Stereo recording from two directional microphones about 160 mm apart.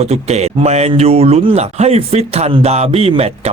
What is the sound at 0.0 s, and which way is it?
Speech, 40° right (ahead or behind).